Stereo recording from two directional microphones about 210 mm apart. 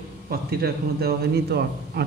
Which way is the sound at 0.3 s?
50° right (ahead or behind).